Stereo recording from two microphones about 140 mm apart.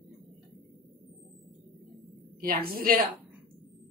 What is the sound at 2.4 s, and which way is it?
Speech, 90° right.